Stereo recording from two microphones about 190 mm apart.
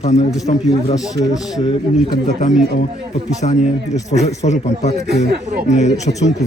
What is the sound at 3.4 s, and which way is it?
A man's voice, 35° left (ahead or behind).